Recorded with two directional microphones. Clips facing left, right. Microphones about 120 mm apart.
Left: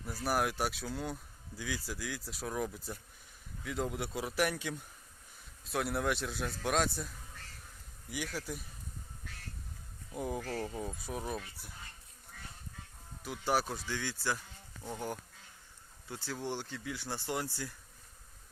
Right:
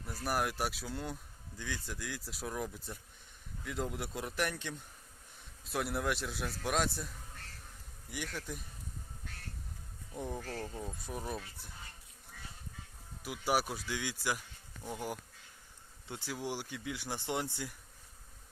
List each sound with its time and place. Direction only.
0.0 s speech: centre (ahead or behind)
8.1 s speech: 5° left (ahead or behind)
10.1 s speech: 10° left (ahead or behind)
13.2 s speech: 10° right (ahead or behind)